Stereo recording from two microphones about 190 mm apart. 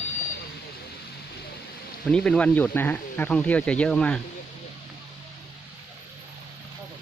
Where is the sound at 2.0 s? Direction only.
5° left (ahead or behind).